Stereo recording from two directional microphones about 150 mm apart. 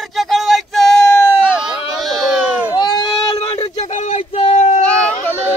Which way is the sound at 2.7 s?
30° left (ahead or behind).